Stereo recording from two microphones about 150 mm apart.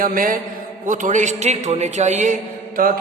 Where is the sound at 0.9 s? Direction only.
55° right (ahead or behind).